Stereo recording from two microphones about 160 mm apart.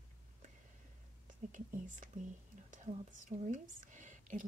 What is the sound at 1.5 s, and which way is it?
Speech, 55° right (ahead or behind).